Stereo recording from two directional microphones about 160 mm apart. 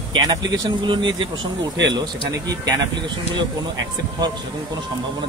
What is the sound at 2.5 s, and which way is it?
Speech, 25° right (ahead or behind).